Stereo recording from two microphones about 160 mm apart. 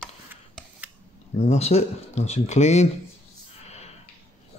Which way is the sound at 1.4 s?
40° left (ahead or behind).